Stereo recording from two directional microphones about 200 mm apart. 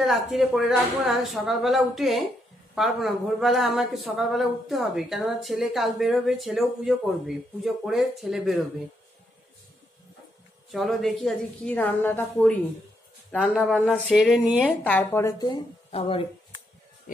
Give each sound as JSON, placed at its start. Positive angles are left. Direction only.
{"t": 0.0, "sound": "speech", "side_deg": 0}
{"t": 10.7, "sound": "speech", "side_deg": 0}